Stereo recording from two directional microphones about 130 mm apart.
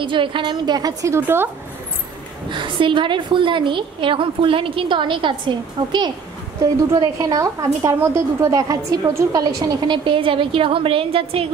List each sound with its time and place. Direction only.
0.0 s a woman's voice: 40° right (ahead or behind); by 1.5 s 15° right (ahead or behind)
2.5 s a woman's voice: 40° right (ahead or behind)
10.0 s a woman's voice: 45° right (ahead or behind)